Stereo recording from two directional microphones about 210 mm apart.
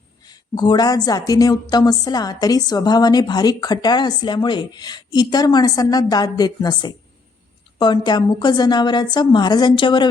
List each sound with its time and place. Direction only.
0.3 s speech: 20° left (ahead or behind)